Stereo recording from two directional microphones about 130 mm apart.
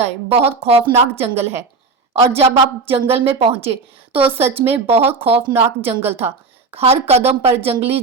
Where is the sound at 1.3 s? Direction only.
20° right (ahead or behind).